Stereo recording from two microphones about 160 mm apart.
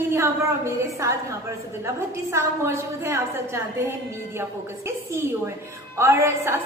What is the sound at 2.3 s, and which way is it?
A woman's voice, 15° right (ahead or behind).